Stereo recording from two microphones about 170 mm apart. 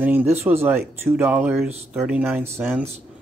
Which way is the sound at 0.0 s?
10° right (ahead or behind).